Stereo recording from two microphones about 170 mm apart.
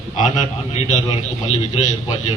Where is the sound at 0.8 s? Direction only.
45° left (ahead or behind).